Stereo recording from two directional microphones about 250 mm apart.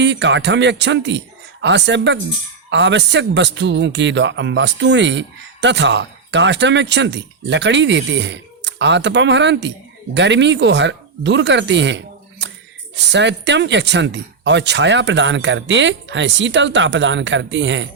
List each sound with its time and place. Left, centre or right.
0.0 s speech: right